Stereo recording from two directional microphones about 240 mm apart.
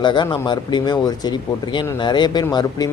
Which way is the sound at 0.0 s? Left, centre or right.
Centre.